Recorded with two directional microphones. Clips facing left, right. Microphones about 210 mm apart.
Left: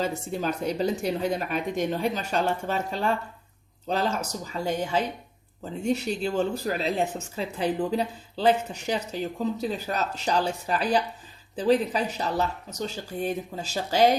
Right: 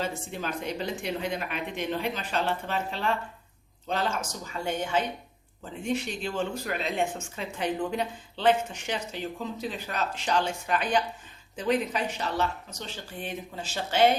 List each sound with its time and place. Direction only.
0.3 s speech: 40° left (ahead or behind)